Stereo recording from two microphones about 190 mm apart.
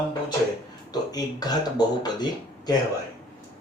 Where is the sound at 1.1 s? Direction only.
20° left (ahead or behind).